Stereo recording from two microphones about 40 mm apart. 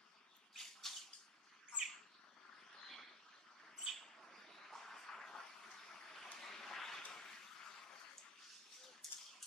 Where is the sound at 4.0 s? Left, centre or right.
Centre.